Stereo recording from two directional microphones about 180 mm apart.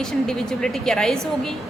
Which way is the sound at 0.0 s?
5° left (ahead or behind).